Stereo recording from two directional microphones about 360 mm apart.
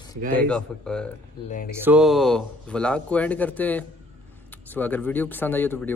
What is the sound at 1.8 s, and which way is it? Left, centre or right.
Speech, centre.